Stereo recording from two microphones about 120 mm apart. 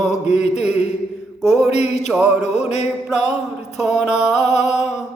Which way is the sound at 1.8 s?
65° left (ahead or behind).